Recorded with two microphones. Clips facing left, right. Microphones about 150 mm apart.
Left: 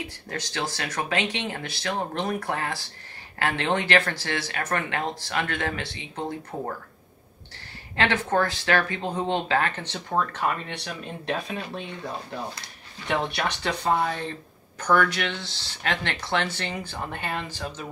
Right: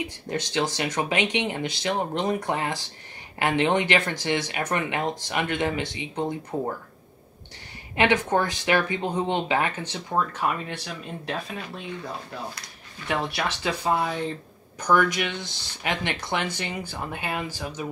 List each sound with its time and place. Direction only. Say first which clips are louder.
0.0 s speech: right 4 dB; 20° right (ahead or behind)
7.9 s speech: right 2 dB; 15° right (ahead or behind)
10.7 s speech: even; centre (ahead or behind)
13.1 s speech: left 1 dB; 5° right (ahead or behind)